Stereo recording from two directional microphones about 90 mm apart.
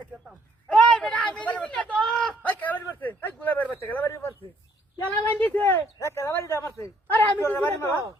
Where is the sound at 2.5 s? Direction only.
20° left (ahead or behind).